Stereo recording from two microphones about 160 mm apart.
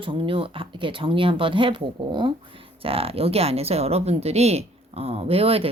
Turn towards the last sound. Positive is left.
turn(degrees=-35)  # may be behind; listen again after turning